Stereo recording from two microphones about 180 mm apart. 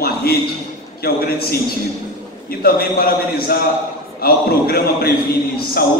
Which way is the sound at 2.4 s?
55° left (ahead or behind).